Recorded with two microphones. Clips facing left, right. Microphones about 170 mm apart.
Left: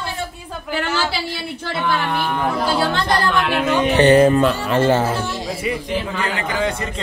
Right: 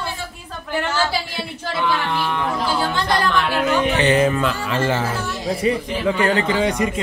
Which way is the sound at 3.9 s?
40° left (ahead or behind).